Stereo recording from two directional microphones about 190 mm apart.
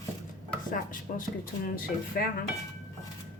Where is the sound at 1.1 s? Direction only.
45° left (ahead or behind).